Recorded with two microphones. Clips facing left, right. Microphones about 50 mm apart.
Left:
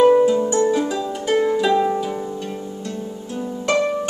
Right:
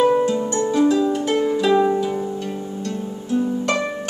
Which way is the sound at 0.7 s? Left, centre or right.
Centre.